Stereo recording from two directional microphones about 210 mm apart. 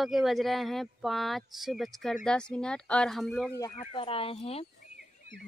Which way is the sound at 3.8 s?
25° left (ahead or behind).